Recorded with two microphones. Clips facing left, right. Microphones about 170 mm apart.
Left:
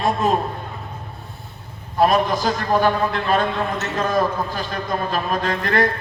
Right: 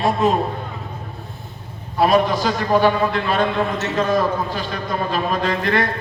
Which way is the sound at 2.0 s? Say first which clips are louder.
Right 3 dB; 45° left (ahead or behind).